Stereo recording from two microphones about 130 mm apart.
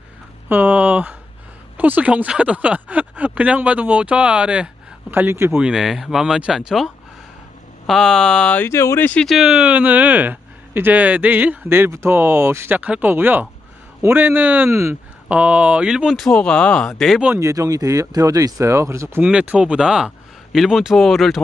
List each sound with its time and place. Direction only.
0.5 s speech: 10° right (ahead or behind)
5.6 s speech: 5° right (ahead or behind); by 9.2 s 15° left (ahead or behind)
9.2 s speech: centre (ahead or behind); by 15.0 s 20° right (ahead or behind)
15.2 s speech: 10° right (ahead or behind)
16.3 s speech: 5° left (ahead or behind)
17.4 s speech: 25° right (ahead or behind)
19.2 s speech: 10° right (ahead or behind)